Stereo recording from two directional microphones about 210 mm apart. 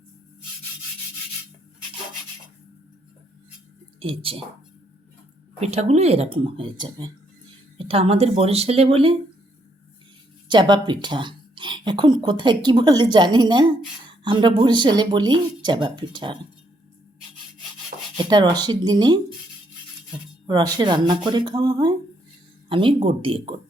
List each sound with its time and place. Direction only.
4.0 s speech: 25° right (ahead or behind)
5.5 s speech: 30° right (ahead or behind)
10.5 s speech: 20° right (ahead or behind)
17.9 s rub: 40° right (ahead or behind)
18.3 s speech: 20° right (ahead or behind)
20.5 s speech: 20° right (ahead or behind)